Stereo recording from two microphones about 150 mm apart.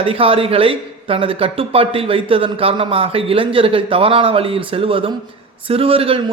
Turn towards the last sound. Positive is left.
turn(degrees=-40)  # may be behind; listen again after turning